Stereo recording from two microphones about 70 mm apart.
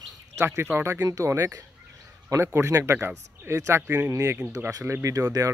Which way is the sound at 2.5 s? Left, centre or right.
Right.